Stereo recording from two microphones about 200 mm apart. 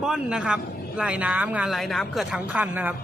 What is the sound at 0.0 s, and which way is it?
Speech, 5° right (ahead or behind).